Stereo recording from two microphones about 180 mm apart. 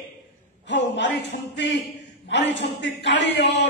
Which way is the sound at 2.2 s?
80° left.